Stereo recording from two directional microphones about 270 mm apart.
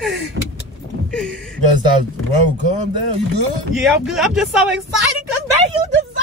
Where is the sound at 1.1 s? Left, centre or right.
Centre.